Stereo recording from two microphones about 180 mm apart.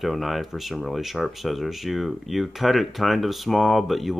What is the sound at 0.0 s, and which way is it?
Speech, centre (ahead or behind).